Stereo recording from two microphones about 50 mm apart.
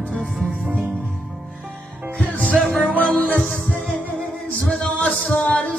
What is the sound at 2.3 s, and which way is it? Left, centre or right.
Music, left.